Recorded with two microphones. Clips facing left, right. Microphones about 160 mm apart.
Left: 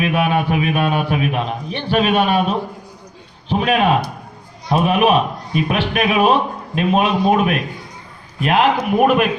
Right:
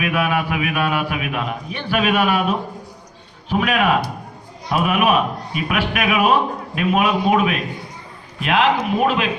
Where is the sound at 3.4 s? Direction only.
25° left (ahead or behind).